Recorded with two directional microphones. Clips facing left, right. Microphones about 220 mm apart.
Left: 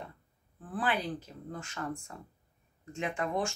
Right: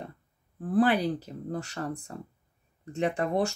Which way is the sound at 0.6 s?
40° right (ahead or behind).